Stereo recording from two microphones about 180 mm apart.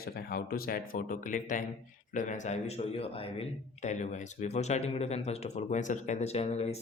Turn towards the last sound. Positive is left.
turn(degrees=35)  # may be behind; listen again after turning